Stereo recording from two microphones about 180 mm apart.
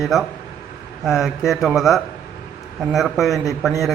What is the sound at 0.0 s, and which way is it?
A man's voice, centre (ahead or behind).